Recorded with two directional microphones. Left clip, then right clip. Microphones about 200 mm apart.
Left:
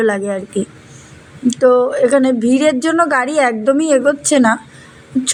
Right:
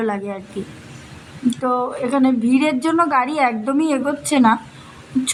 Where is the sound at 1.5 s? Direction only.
15° left (ahead or behind).